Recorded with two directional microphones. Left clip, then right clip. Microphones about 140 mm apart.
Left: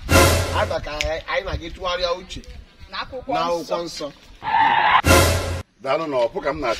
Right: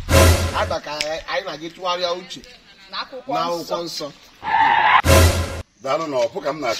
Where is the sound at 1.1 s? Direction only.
20° left (ahead or behind).